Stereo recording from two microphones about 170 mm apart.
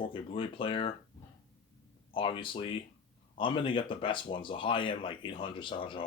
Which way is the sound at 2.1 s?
30° left (ahead or behind).